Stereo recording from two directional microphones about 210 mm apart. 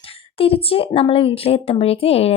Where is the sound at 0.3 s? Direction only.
25° left (ahead or behind).